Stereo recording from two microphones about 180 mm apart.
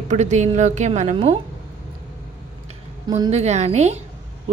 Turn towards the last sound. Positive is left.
turn(degrees=-40)  # may be behind; listen again after turning